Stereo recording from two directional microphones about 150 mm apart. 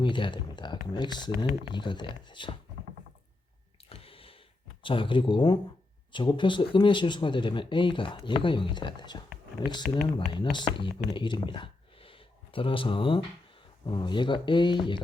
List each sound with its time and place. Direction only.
0.0 s speech: 30° left (ahead or behind)
3.8 s a sound: 40° left (ahead or behind)
4.8 s speech: 35° left (ahead or behind)